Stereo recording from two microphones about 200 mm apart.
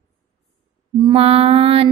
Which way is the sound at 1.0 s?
30° right (ahead or behind).